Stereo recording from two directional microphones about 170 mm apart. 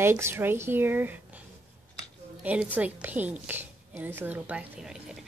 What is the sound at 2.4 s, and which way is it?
A woman's voice, 10° right (ahead or behind).